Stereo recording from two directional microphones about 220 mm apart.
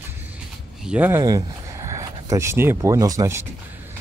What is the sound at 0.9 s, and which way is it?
Speech, 10° right (ahead or behind).